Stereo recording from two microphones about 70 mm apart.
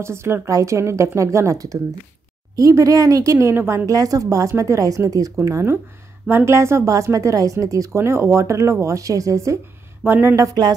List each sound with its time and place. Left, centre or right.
0.0 s a woman's voice: right
3.8 s a woman's voice: right
5.4 s a woman's voice: right
8.0 s a woman's voice: right
10.0 s speech: right
10.3 s a woman's voice: right